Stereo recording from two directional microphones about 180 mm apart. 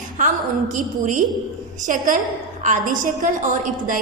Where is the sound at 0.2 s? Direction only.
45° right (ahead or behind).